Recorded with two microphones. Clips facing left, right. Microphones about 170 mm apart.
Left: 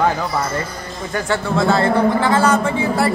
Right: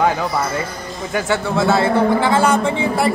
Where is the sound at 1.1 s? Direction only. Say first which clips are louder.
Right 1 dB; 5° right (ahead or behind).